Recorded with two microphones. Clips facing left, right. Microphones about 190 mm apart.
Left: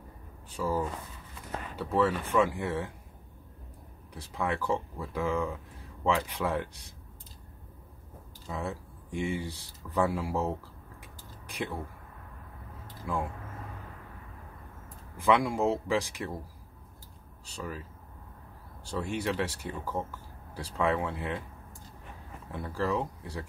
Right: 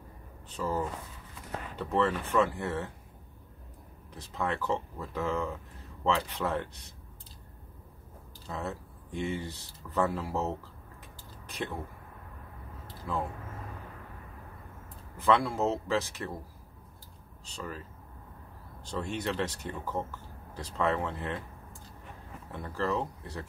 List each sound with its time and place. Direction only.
0.5 s speech: 10° left (ahead or behind)
4.1 s speech: 10° left (ahead or behind)
8.5 s speech: 10° left (ahead or behind)
13.1 s speech: 10° left (ahead or behind)
15.1 s speech: 10° left (ahead or behind)
17.5 s speech: 10° left (ahead or behind)
18.9 s speech: 10° left (ahead or behind)
22.5 s speech: 10° left (ahead or behind)